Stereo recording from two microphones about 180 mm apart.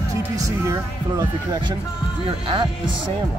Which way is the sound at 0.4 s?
20° right (ahead or behind).